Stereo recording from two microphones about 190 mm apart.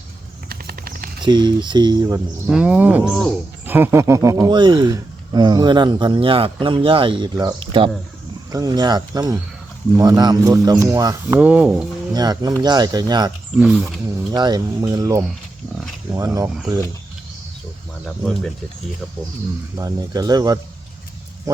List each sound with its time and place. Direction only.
0.4 s a sound: 50° right (ahead or behind)
1.2 s speech: 25° right (ahead or behind)
2.5 s speech: 5° right (ahead or behind)
3.7 s speech: 10° right (ahead or behind)
12.1 s speech: 20° right (ahead or behind)
13.6 s speech: 5° right (ahead or behind)
14.3 s speech: 20° right (ahead or behind)
19.7 s speech: 20° right (ahead or behind)